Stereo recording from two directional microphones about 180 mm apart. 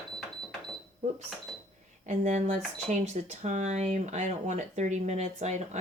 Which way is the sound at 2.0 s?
40° right (ahead or behind).